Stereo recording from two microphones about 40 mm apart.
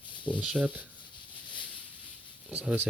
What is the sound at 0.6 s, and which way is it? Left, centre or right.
Speech, right.